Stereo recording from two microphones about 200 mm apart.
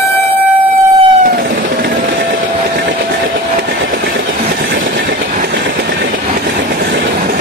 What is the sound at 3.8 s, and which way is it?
Train, 70° right (ahead or behind).